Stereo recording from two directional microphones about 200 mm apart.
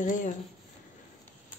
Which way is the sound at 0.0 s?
40° left (ahead or behind).